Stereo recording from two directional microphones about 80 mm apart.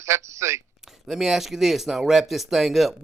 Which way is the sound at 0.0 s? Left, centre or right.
Right.